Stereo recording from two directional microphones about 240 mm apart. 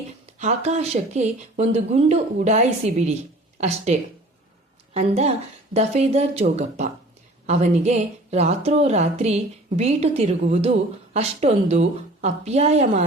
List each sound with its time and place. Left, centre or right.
0.3 s a woman's voice: right
4.9 s a woman's voice: right